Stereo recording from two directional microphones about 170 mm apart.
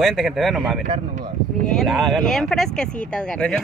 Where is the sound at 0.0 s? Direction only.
Centre (ahead or behind).